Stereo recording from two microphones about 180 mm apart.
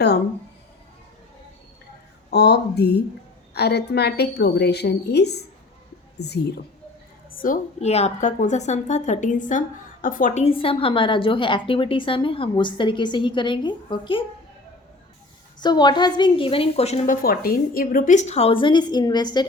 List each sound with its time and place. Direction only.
2.3 s a woman's voice: 65° left (ahead or behind)
7.3 s a woman's voice: 50° left (ahead or behind); by 14.3 s 25° left (ahead or behind)
15.6 s a woman's voice: 25° left (ahead or behind)
17.2 s a woman's voice: 55° left (ahead or behind); by 19.5 s 25° left (ahead or behind)